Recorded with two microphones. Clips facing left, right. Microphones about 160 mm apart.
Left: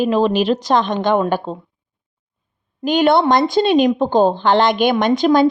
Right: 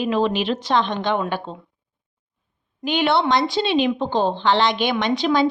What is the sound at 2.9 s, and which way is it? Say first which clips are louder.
Speech: left 6 dB; 45° left (ahead or behind).